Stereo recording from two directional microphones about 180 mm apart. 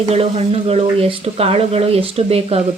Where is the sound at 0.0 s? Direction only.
35° right (ahead or behind).